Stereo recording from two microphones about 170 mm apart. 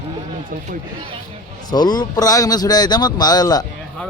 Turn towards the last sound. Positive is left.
turn(degrees=20)  # may be behind; listen again after turning